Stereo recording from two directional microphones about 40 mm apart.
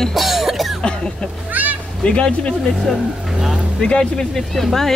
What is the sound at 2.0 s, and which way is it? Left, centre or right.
Speech, left.